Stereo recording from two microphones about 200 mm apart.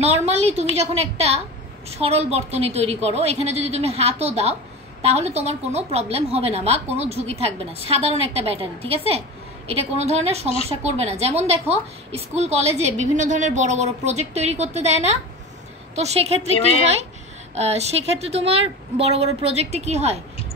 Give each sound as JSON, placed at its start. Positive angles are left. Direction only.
{"t": 0.0, "sound": "a woman's voice", "side_deg": -30}
{"t": 16.5, "sound": "a woman's voice", "side_deg": 30}
{"t": 17.6, "sound": "a woman's voice", "side_deg": -30}